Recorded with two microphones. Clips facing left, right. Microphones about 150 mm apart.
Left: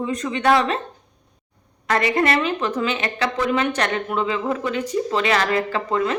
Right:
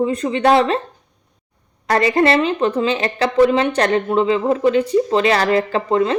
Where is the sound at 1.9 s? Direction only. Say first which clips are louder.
Right 5 dB; 35° right (ahead or behind).